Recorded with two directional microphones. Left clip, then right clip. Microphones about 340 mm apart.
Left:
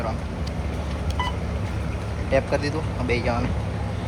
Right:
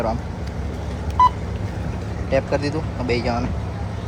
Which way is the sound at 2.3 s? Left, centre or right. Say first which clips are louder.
Right 2 dB; centre.